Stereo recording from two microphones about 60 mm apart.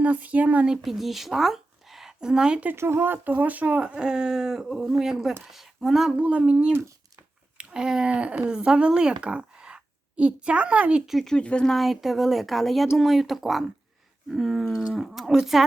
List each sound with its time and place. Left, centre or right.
0.0 s speech: right
0.8 s speech: centre
2.7 s speech: right; by 6.1 s centre
6.1 s speech: right
11.0 s speech: centre
11.3 s speech: centre
11.7 s speech: centre